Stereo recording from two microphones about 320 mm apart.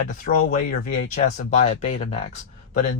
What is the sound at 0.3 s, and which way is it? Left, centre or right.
Speech, left.